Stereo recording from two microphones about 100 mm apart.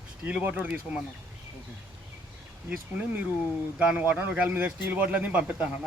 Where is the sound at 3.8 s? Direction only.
10° right (ahead or behind).